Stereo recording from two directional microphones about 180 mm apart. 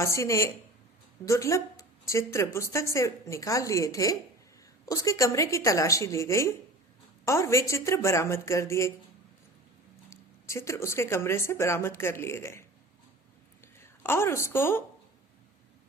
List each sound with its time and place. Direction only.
0.0 s speech: 15° left (ahead or behind)
10.1 s speech: 15° left (ahead or behind)
13.7 s a woman's voice: 15° left (ahead or behind)